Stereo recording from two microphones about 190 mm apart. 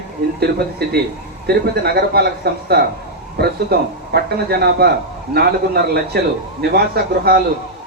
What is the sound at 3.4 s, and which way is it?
Speech, 55° right (ahead or behind).